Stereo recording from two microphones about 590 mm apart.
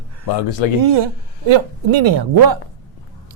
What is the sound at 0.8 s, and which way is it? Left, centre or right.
A man's voice, right.